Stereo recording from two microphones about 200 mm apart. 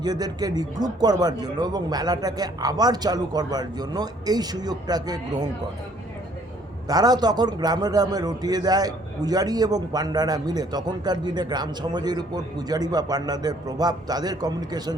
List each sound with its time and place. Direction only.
0.0 s a man's voice: 20° right (ahead or behind)
6.8 s a man's voice: 20° right (ahead or behind)